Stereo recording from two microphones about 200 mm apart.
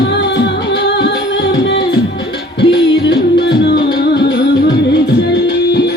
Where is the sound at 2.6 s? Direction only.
60° left (ahead or behind).